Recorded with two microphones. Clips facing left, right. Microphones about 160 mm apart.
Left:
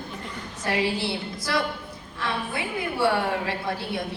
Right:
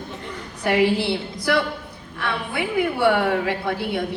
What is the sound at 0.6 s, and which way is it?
A woman's voice, 65° right (ahead or behind).